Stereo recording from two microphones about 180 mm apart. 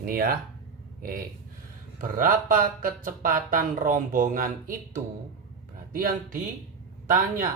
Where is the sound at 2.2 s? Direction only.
50° right (ahead or behind).